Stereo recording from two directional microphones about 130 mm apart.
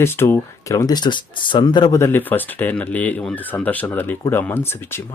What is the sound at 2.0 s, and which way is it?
Speech, 15° left (ahead or behind).